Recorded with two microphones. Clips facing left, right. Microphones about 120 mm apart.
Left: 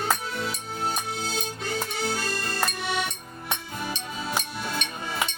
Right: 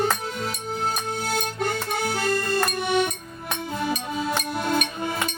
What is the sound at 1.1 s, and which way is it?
Music, 60° right (ahead or behind).